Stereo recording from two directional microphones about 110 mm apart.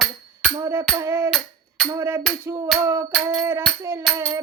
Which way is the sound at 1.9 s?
25° right (ahead or behind).